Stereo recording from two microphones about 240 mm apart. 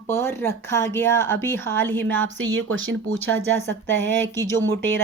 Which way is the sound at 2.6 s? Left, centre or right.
Right.